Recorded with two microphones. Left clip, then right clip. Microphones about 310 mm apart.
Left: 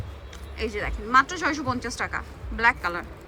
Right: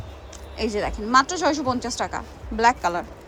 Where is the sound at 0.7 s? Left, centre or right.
Centre.